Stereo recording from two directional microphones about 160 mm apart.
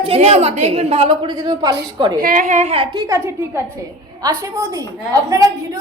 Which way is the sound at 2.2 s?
55° right (ahead or behind).